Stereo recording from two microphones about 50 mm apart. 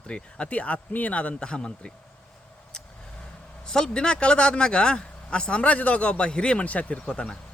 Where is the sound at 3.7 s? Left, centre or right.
Centre; by 7.1 s left.